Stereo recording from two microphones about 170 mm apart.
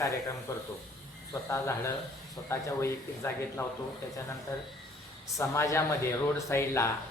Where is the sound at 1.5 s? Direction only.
15° left (ahead or behind).